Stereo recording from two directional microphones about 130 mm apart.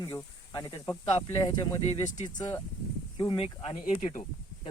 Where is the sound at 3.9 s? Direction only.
75° left (ahead or behind).